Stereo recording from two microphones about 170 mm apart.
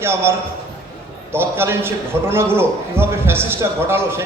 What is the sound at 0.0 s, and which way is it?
A man's voice, 15° right (ahead or behind).